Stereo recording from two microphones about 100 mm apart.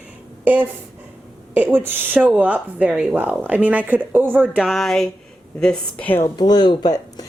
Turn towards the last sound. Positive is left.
turn(degrees=40)  # may be behind; listen again after turning